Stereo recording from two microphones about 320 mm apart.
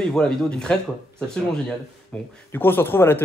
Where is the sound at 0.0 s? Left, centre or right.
Centre.